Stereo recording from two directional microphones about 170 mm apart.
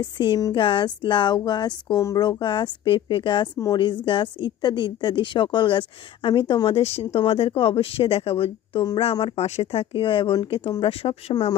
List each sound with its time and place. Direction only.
0.0 s a woman's voice: 25° left (ahead or behind)